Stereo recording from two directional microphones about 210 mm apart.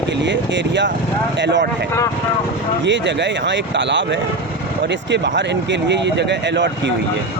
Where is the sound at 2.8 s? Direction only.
60° right (ahead or behind).